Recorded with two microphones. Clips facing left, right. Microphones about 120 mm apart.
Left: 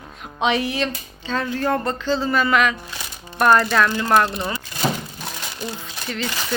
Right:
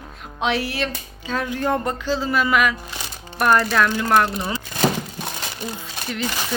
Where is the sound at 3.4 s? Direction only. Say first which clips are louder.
Left 2 dB; 5° right (ahead or behind).